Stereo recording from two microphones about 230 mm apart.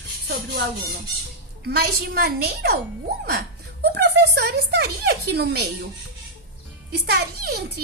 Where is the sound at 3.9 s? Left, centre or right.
Right.